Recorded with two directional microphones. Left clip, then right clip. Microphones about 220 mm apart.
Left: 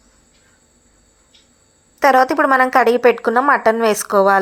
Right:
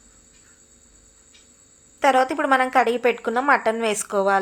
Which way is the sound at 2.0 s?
20° left (ahead or behind).